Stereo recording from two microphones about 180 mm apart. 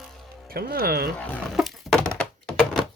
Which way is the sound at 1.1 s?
10° left (ahead or behind).